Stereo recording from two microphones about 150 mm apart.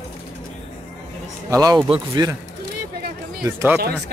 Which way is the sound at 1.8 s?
35° right (ahead or behind).